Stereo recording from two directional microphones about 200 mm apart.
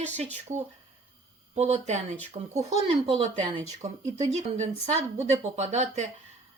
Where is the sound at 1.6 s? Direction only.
35° right (ahead or behind).